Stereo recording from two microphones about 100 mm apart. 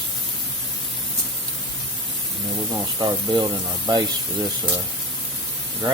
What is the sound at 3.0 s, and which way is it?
Speech, 40° right (ahead or behind).